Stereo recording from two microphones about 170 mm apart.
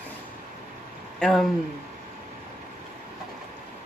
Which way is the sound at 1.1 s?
5° left (ahead or behind).